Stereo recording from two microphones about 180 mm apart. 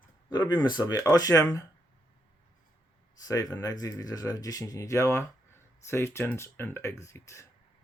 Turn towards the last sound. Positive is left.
turn(degrees=15)  # may be behind; listen again after turning